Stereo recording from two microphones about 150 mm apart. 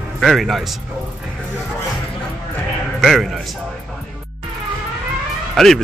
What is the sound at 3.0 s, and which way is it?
Speech, centre (ahead or behind).